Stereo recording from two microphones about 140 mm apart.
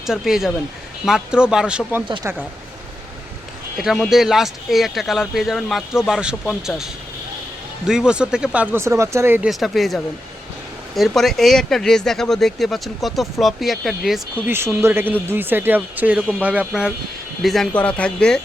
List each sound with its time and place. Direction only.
0.0 s speech: 5° right (ahead or behind)
2.3 s speech: 15° right (ahead or behind)
3.8 s speech: centre (ahead or behind)
9.5 s speech: centre (ahead or behind)
14.4 s speech: 15° right (ahead or behind); by 18.3 s 5° left (ahead or behind)